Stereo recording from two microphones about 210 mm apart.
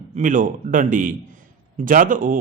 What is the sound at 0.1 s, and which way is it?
A man's voice, 40° right (ahead or behind).